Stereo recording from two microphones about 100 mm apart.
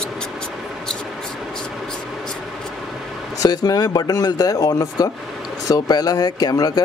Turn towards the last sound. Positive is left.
turn(degrees=40)  # may be behind; listen again after turning